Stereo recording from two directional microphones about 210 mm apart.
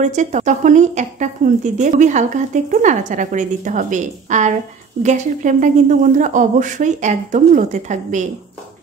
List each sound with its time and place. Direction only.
0.0 s a woman's voice: 35° right (ahead or behind)